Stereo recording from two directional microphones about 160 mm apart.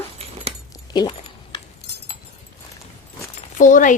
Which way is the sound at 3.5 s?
55° left (ahead or behind).